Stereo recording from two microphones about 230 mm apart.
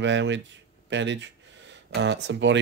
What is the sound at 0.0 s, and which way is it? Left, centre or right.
Speech, right.